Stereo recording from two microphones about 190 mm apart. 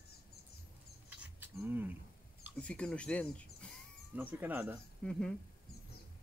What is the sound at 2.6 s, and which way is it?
Speech, 5° left (ahead or behind).